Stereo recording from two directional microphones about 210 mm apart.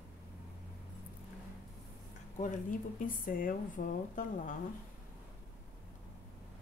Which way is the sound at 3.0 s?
40° left (ahead or behind).